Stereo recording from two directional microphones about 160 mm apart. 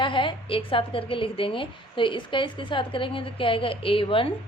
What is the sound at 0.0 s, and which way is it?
A woman's voice, 30° left (ahead or behind).